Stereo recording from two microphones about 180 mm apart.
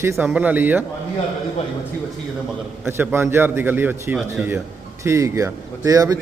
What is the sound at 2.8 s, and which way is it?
Speech, 10° right (ahead or behind).